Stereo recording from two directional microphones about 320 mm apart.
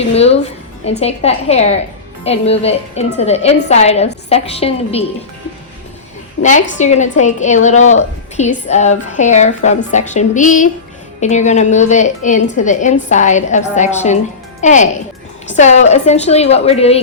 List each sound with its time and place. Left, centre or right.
0.1 s a woman's voice: centre
6.4 s a woman's voice: left